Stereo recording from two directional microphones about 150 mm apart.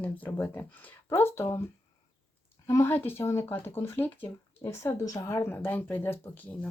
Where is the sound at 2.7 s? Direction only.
15° left (ahead or behind).